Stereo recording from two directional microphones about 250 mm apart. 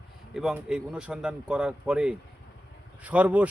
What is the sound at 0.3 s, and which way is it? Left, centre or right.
Speech, centre.